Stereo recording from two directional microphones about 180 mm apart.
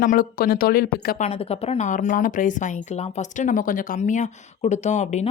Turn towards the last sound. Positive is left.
turn(degrees=40)  # may be behind; listen again after turning